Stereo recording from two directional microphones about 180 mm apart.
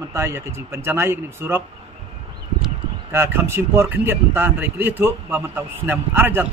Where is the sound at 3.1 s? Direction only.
15° right (ahead or behind).